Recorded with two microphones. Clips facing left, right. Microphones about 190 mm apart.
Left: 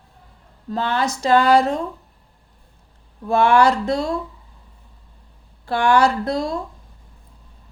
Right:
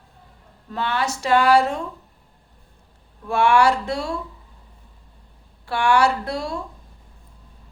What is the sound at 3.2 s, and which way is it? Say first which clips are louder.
Speech: left 2 dB; 40° left (ahead or behind).